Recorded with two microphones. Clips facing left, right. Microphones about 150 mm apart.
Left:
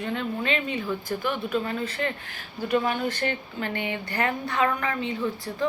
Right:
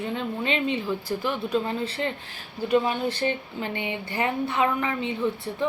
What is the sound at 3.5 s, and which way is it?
A woman's voice, 20° right (ahead or behind).